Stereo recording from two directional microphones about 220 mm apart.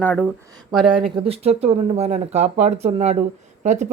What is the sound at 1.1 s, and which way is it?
Speech, 25° right (ahead or behind).